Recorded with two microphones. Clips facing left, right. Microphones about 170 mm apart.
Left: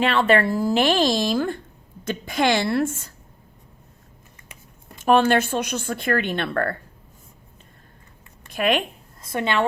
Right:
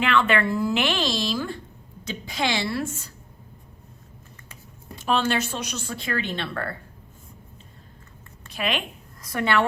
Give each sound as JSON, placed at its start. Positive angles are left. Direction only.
{"t": 0.0, "sound": "a woman's voice", "side_deg": 35}
{"t": 4.9, "sound": "speech", "side_deg": 50}
{"t": 8.4, "sound": "speech", "side_deg": 50}
{"t": 9.2, "sound": "a woman's voice", "side_deg": 25}